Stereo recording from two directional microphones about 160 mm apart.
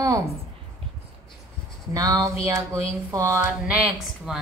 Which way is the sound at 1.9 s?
20° right (ahead or behind).